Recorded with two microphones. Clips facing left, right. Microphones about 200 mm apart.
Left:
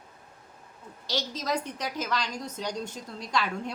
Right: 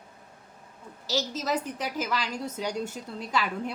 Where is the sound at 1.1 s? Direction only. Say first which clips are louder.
Right 2 dB; 5° right (ahead or behind).